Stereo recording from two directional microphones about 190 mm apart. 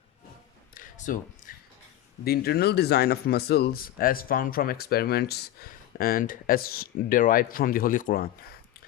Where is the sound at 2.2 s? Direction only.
55° left (ahead or behind).